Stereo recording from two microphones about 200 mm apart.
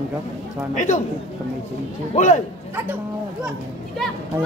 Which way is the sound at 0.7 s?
40° left (ahead or behind).